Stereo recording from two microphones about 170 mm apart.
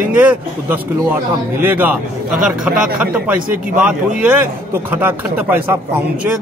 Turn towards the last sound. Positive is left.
turn(degrees=-10)  # may be behind; listen again after turning